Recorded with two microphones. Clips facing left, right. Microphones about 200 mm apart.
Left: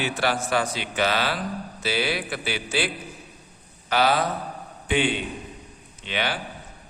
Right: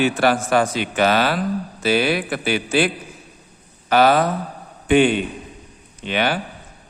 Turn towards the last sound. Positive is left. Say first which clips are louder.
# right 7 dB
turn(degrees=-50)  # may be behind; listen again after turning